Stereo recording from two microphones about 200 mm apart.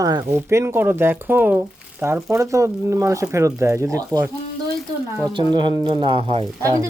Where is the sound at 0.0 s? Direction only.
20° right (ahead or behind).